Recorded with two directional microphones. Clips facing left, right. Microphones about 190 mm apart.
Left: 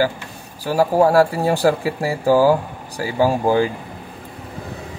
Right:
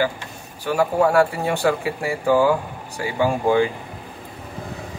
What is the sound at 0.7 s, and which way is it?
Speech, 35° left (ahead or behind).